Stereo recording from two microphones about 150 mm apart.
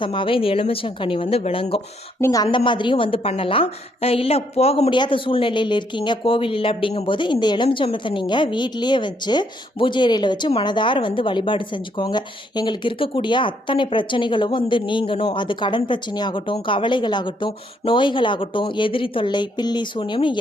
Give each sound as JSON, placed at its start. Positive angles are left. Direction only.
{"t": 0.0, "sound": "speech", "side_deg": 35}
{"t": 2.2, "sound": "speech", "side_deg": 25}